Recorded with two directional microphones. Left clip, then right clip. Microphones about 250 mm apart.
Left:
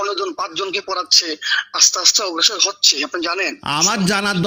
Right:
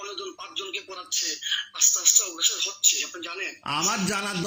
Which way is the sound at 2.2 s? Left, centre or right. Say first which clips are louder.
Left 10 dB; left.